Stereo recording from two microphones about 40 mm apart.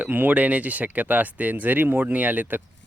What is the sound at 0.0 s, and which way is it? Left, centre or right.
Speech, right.